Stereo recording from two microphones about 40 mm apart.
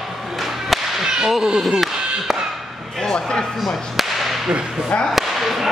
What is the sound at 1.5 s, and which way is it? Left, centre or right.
Speech, centre.